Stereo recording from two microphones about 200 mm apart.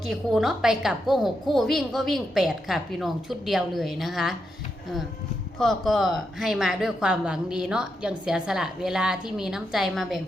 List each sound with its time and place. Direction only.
0.0 s speech: centre (ahead or behind)
5.5 s speech: centre (ahead or behind)